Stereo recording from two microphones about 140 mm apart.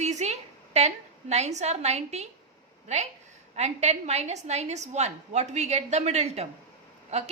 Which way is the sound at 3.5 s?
50° right (ahead or behind).